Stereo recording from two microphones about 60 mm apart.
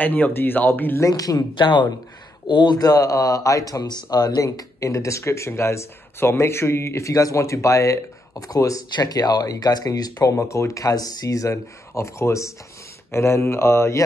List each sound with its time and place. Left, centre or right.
0.0 s speech: left
1.0 s speech: left
2.8 s speech: left
11.9 s speech: left
13.1 s speech: left